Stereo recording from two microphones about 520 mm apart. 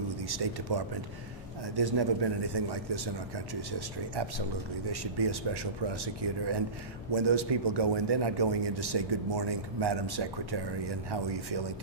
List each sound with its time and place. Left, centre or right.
0.2 s a man's voice: right